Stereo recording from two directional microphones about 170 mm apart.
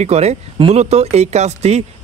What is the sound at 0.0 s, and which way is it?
Speech, 40° right (ahead or behind).